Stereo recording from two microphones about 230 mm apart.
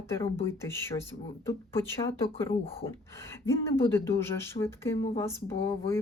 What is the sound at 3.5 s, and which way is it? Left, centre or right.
Speech, centre.